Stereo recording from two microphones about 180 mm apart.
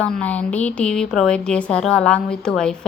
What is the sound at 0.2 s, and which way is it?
Speech, 10° left (ahead or behind).